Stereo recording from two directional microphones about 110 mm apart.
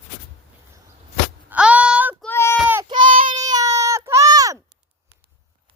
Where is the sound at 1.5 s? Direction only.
10° right (ahead or behind).